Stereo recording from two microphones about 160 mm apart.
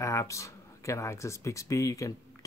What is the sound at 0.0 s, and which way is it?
Speech, 20° left (ahead or behind).